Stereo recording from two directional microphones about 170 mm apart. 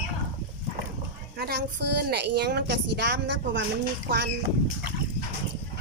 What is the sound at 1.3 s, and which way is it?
A woman's voice, 75° right (ahead or behind).